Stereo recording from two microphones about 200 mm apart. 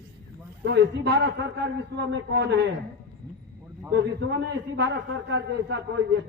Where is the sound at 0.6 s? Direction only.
60° right (ahead or behind).